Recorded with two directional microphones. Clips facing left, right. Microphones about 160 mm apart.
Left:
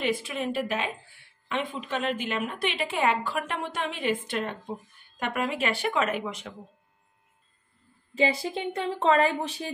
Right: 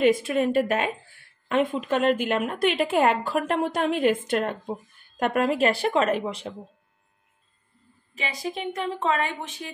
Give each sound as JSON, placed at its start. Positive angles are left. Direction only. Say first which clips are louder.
{"t": 0.0, "sound": "a woman's voice", "louder": "right 8 dB", "side_deg": -45}
{"t": 8.1, "sound": "speech", "louder": "left 6 dB", "side_deg": 30}